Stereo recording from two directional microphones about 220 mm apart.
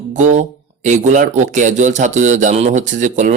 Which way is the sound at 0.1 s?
35° right (ahead or behind).